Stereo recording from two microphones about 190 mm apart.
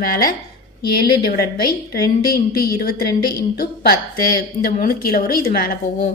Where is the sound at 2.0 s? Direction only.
55° left (ahead or behind).